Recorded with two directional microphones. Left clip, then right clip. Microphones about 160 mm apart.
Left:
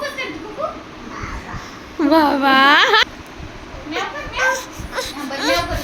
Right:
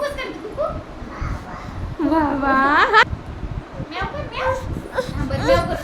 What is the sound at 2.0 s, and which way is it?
Snicker, centre (ahead or behind).